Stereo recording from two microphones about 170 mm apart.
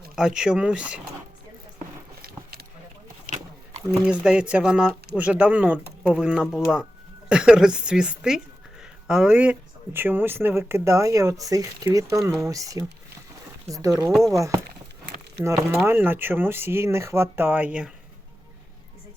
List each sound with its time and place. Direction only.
0.2 s a woman's voice: 5° right (ahead or behind)
2.2 s vehicle: 65° right (ahead or behind)
3.2 s a sound: 45° right (ahead or behind)
4.0 s a woman's voice: 5° right (ahead or behind)
15.4 s speech: 15° right (ahead or behind)